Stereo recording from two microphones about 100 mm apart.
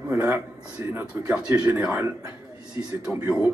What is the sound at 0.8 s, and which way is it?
Speech, 25° right (ahead or behind).